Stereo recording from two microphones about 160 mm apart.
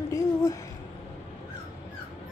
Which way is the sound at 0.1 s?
20° left (ahead or behind).